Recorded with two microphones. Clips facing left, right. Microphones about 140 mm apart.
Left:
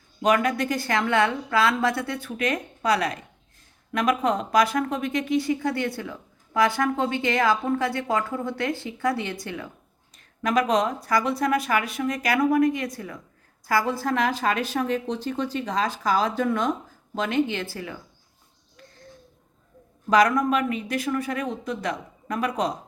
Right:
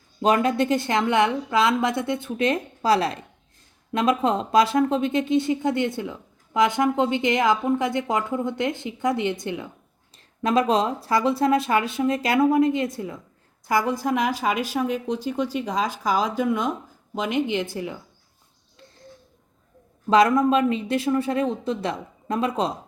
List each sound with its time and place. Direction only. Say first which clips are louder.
0.2 s a woman's voice: right 2 dB; 30° right (ahead or behind)
20.1 s speech: right 2 dB; 25° right (ahead or behind)